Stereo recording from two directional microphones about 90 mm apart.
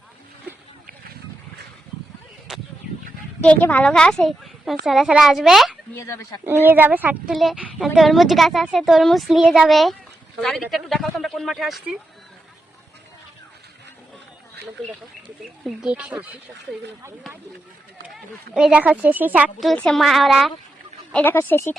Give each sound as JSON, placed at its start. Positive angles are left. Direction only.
{"t": 2.5, "sound": "a sound", "side_deg": -5}
{"t": 3.4, "sound": "a woman's voice", "side_deg": 15}
{"t": 5.9, "sound": "speech", "side_deg": 30}
{"t": 6.4, "sound": "speech", "side_deg": -25}
{"t": 7.3, "sound": "a woman's voice", "side_deg": -5}
{"t": 15.6, "sound": "speech", "side_deg": -10}
{"t": 18.1, "sound": "a woman's voice", "side_deg": -5}
{"t": 18.8, "sound": "speech", "side_deg": -15}
{"t": 19.7, "sound": "speech", "side_deg": 10}
{"t": 20.0, "sound": "a woman's voice", "side_deg": 0}
{"t": 21.2, "sound": "speech", "side_deg": 30}